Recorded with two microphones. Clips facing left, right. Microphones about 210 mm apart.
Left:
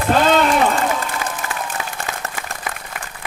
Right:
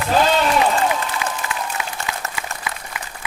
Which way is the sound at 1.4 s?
45° left (ahead or behind).